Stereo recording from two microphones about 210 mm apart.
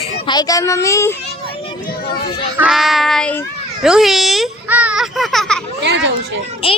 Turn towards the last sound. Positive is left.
turn(degrees=25)  # may be behind; listen again after turning